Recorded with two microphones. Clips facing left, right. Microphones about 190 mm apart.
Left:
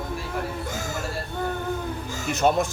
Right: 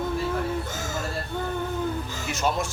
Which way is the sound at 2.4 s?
50° left (ahead or behind).